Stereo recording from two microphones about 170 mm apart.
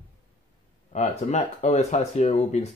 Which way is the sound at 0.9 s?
40° left (ahead or behind).